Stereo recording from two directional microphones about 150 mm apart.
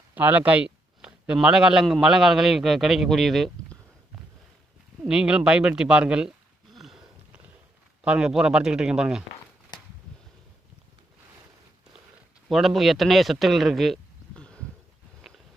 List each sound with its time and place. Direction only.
0.1 s a man's voice: 10° right (ahead or behind)
5.0 s a man's voice: 5° right (ahead or behind)
6.7 s a sound: centre (ahead or behind)
8.0 s a man's voice: 5° right (ahead or behind)
12.5 s speech: centre (ahead or behind)